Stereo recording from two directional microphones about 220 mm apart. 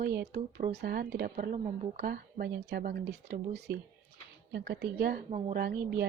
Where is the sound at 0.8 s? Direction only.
45° right (ahead or behind).